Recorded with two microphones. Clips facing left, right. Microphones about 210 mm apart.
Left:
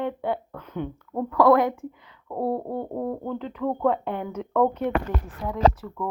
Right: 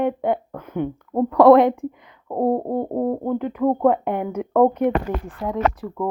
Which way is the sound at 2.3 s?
40° right (ahead or behind).